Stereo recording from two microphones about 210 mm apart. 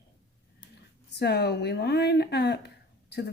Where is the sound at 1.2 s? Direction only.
50° left (ahead or behind).